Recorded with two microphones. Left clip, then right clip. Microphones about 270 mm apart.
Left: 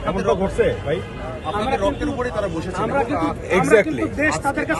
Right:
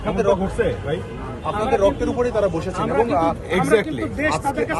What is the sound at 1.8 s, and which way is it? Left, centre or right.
Speech, right.